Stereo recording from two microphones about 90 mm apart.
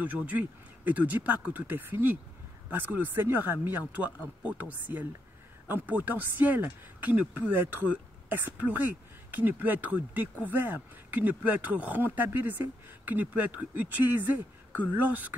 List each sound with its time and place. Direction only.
0.0 s speech: 15° right (ahead or behind)